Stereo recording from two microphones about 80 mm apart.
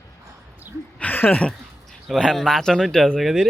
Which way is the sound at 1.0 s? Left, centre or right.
Left.